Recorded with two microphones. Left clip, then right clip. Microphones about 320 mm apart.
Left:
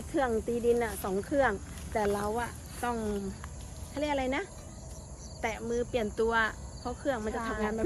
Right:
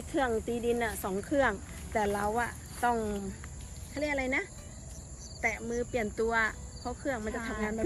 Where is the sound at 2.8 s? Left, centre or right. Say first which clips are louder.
Right 3 dB; centre.